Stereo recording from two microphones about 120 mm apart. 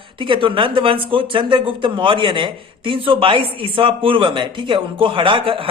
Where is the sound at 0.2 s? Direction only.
45° right (ahead or behind).